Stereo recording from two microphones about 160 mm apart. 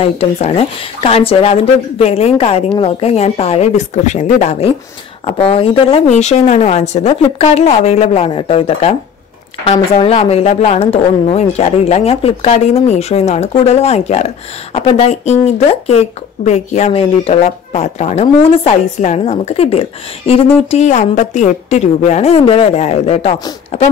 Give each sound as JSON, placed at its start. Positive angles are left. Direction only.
{"t": 0.0, "sound": "speech", "side_deg": 40}
{"t": 20.7, "sound": "a woman's voice", "side_deg": 45}